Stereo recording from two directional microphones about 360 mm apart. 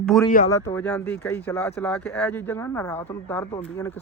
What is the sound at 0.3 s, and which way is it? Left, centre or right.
Speech, left.